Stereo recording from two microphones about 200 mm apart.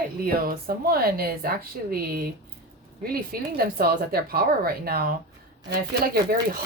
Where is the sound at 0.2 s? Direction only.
50° right (ahead or behind).